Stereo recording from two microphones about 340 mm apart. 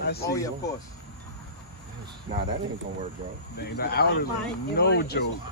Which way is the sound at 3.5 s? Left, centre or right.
Left.